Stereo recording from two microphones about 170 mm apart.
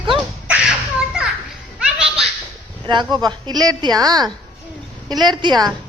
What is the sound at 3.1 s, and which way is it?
A woman's voice, 25° right (ahead or behind).